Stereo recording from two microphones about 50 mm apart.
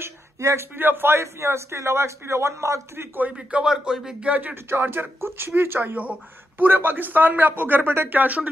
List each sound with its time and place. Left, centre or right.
0.4 s speech: right
0.7 s a man's voice: right
3.6 s speech: centre
4.2 s speech: right
4.6 s speech: right
8.1 s speech: right